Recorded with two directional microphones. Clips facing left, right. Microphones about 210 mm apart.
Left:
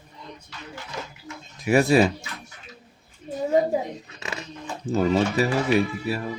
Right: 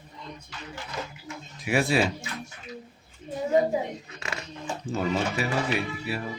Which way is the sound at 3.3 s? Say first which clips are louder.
Left 2 dB; 35° left (ahead or behind).